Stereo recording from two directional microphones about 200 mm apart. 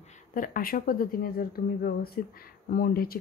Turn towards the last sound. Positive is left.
turn(degrees=50)  # may be behind; listen again after turning